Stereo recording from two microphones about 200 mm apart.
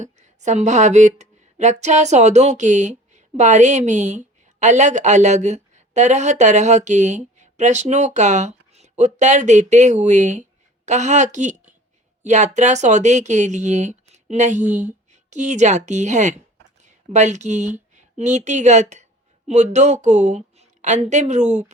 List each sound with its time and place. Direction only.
0.0 s speech: 35° right (ahead or behind)